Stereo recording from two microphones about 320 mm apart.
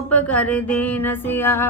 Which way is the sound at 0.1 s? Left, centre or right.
Centre.